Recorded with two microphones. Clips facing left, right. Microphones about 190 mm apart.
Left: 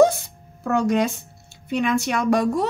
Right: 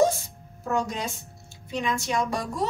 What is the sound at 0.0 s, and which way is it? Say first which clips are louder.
A woman's voice: left 6 dB; 65° left (ahead or behind).